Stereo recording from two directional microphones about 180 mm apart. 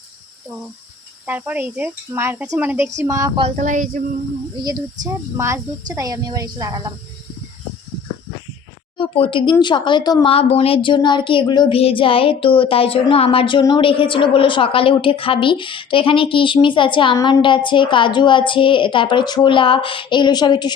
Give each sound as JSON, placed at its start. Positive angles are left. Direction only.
{"t": 1.3, "sound": "speech", "side_deg": -10}
{"t": 3.4, "sound": "speech", "side_deg": -40}
{"t": 4.5, "sound": "a woman's voice", "side_deg": -20}
{"t": 9.0, "sound": "speech", "side_deg": 30}
{"t": 10.3, "sound": "speech", "side_deg": 35}